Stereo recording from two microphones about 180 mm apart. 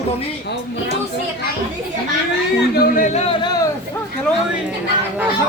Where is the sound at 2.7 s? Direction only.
55° left (ahead or behind); by 3.3 s 40° left (ahead or behind).